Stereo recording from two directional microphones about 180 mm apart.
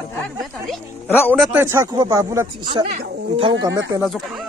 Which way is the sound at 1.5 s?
15° right (ahead or behind).